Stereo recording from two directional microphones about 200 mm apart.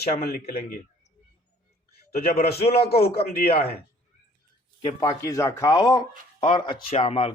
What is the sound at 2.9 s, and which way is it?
Speech, 30° left (ahead or behind).